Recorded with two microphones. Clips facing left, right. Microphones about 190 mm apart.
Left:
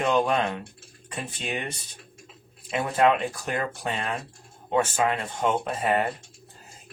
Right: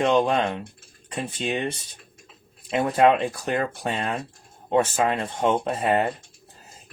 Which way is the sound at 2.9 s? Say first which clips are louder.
Right 2 dB; 25° right (ahead or behind).